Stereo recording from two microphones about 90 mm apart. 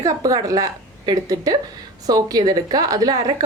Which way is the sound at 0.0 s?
40° right (ahead or behind).